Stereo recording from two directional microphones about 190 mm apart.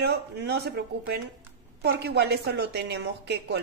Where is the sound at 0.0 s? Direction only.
60° right (ahead or behind).